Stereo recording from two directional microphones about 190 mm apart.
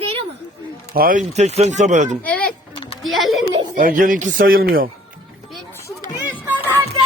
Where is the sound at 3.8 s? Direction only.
45° right (ahead or behind).